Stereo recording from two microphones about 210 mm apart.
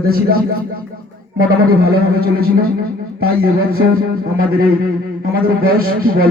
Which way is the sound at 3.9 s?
45° right (ahead or behind).